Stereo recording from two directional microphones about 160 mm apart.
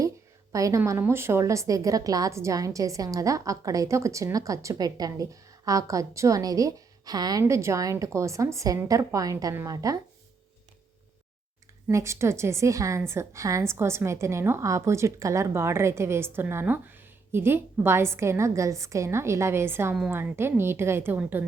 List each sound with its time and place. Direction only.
0.5 s a woman's voice: 20° right (ahead or behind)
11.9 s a woman's voice: 20° right (ahead or behind)